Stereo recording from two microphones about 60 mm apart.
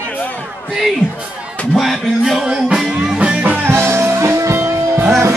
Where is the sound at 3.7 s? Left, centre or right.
Right.